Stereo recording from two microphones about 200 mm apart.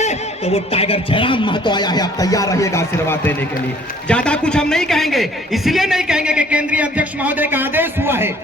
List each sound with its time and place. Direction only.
0.0 s a man's voice: 30° left (ahead or behind); by 8.3 s 10° right (ahead or behind)